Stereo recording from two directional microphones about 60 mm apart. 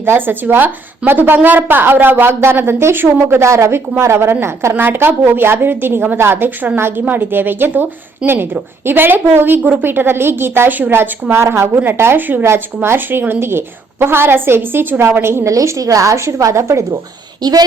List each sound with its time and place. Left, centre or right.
0.0 s a woman's voice: right
3.5 s a woman's voice: right
11.3 s a woman's voice: right
15.4 s a woman's voice: right